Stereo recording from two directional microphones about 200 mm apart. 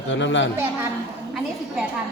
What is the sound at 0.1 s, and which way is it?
Speech, 65° left (ahead or behind).